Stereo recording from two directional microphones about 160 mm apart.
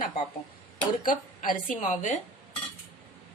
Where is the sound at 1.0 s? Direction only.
55° left (ahead or behind).